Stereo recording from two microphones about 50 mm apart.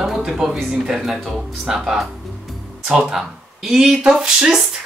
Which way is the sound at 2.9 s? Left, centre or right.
Centre.